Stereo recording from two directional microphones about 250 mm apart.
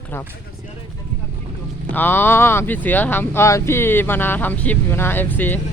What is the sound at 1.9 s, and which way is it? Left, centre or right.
Speech, centre.